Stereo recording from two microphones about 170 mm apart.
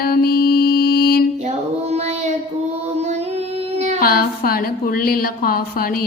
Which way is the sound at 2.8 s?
40° right (ahead or behind).